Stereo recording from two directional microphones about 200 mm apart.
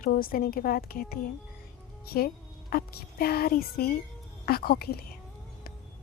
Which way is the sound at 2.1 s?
50° left (ahead or behind).